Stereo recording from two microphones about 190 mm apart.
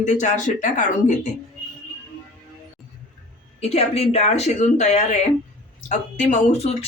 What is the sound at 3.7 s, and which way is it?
Speech, 30° left (ahead or behind).